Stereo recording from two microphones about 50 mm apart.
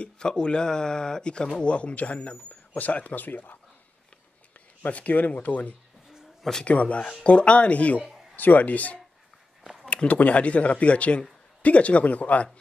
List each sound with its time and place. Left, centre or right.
0.0 s speech: centre; by 3.5 s left
4.8 s speech: left